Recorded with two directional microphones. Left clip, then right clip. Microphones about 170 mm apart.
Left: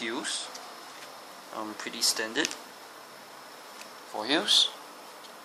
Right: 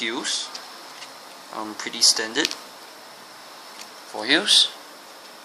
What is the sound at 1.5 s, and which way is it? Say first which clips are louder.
Speech: right 7 dB; 15° right (ahead or behind).